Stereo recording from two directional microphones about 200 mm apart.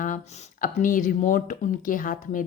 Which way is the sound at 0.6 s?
40° left (ahead or behind).